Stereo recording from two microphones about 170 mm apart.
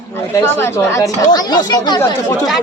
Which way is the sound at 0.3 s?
15° left (ahead or behind).